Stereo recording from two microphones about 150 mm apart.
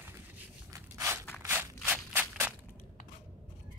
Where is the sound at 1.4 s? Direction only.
15° right (ahead or behind).